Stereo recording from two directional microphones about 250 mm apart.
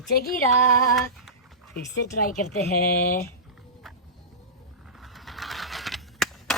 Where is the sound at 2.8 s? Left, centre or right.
Left.